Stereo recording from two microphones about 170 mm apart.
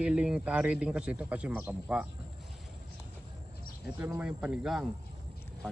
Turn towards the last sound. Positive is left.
turn(degrees=-5)  # may be behind; listen again after turning